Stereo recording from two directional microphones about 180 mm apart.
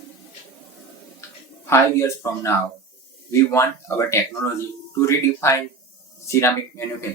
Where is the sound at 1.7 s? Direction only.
15° left (ahead or behind).